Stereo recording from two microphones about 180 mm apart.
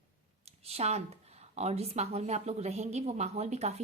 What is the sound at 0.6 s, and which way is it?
A woman's voice, 35° right (ahead or behind).